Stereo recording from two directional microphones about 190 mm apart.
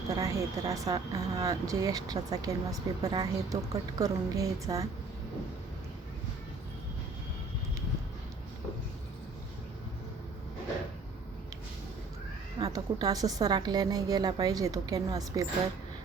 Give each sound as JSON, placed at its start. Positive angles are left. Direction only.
{"t": 0.1, "sound": "speech", "side_deg": -15}
{"t": 12.5, "sound": "a woman's voice", "side_deg": -20}